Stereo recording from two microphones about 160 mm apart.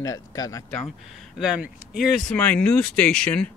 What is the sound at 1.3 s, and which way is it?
Speech, 5° right (ahead or behind).